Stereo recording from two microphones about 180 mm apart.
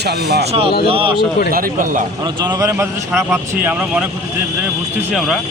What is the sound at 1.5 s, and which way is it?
Speech, 50° right (ahead or behind).